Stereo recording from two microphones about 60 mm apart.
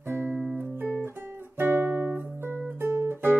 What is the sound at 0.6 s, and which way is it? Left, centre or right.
Music, right.